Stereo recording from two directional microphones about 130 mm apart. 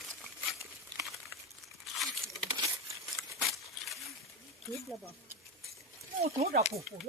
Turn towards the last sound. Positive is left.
turn(degrees=-60)  # may be behind; listen again after turning